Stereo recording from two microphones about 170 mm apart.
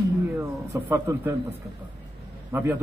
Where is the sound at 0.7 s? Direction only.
15° right (ahead or behind).